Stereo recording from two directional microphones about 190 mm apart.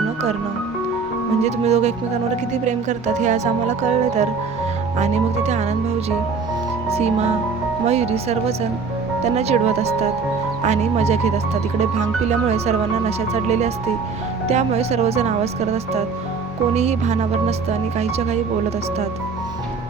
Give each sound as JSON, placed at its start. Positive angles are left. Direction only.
{"t": 1.5, "sound": "speech", "side_deg": -35}
{"t": 3.2, "sound": "speech", "side_deg": -35}
{"t": 7.9, "sound": "speech", "side_deg": -35}
{"t": 12.5, "sound": "speech", "side_deg": -35}